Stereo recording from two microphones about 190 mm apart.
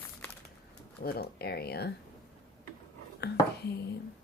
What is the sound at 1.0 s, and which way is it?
Speech, 55° left (ahead or behind).